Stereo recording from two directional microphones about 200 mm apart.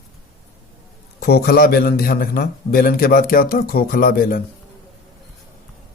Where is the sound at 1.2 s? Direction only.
50° left (ahead or behind).